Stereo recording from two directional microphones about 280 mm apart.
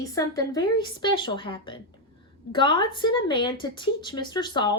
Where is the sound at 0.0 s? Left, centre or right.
Centre.